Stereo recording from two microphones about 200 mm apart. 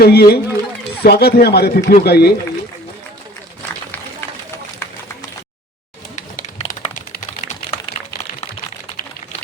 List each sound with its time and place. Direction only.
0.0 s speech: 50° left (ahead or behind)
6.1 s typing: 40° left (ahead or behind)